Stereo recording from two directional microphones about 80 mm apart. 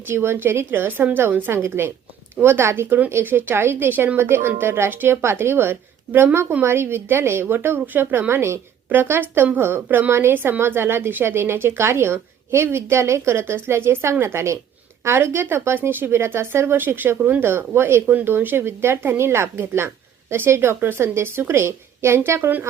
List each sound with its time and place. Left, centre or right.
0.1 s a woman's voice: right